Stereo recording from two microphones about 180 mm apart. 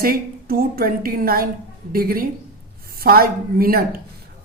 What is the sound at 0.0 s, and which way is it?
Speech, 55° right (ahead or behind).